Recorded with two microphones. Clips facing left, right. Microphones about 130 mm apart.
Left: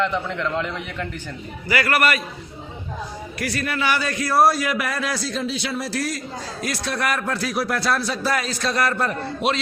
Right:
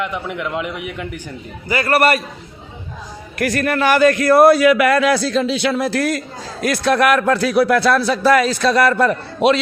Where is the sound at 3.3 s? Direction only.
50° right (ahead or behind).